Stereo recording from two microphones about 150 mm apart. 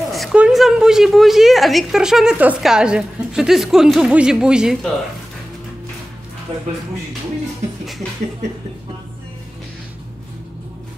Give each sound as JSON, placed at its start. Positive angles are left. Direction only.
{"t": 0.0, "sound": "a woman's voice", "side_deg": 0}